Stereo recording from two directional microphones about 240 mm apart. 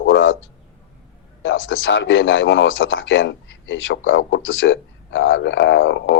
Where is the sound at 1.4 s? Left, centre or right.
Left.